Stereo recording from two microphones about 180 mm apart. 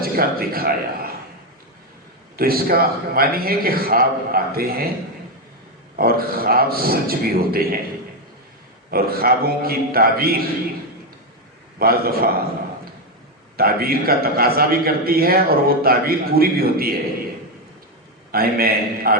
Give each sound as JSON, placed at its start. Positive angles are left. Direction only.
{"t": 0.0, "sound": "a man's voice", "side_deg": -55}
{"t": 2.3, "sound": "a man's voice", "side_deg": -55}
{"t": 6.0, "sound": "a man's voice", "side_deg": -55}
{"t": 8.9, "sound": "a man's voice", "side_deg": -55}
{"t": 11.8, "sound": "a man's voice", "side_deg": -55}
{"t": 13.6, "sound": "a man's voice", "side_deg": -55}
{"t": 18.3, "sound": "a man's voice", "side_deg": -55}